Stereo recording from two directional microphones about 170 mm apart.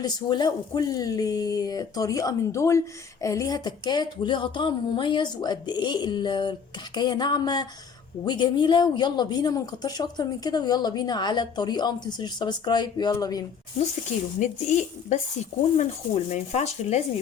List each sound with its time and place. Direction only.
0.0 s speech: 25° left (ahead or behind)
14.3 s speech: 45° left (ahead or behind)